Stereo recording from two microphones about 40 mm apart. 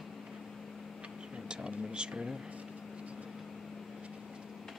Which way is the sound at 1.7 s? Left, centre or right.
Right.